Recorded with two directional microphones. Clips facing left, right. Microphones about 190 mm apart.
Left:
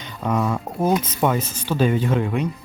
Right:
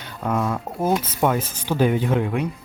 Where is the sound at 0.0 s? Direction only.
5° right (ahead or behind).